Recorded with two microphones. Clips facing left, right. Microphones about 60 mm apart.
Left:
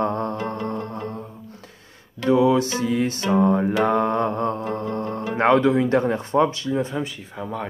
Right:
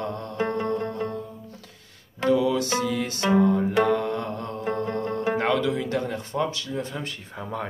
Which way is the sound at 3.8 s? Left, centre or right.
Left.